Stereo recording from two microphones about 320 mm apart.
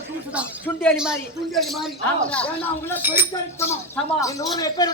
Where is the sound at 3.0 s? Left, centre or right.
Centre.